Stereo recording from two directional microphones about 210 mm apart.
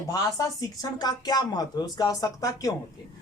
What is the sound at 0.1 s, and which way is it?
Speech, 15° left (ahead or behind).